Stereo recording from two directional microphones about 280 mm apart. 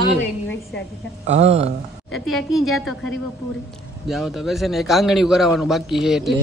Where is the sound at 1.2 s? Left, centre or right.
Right.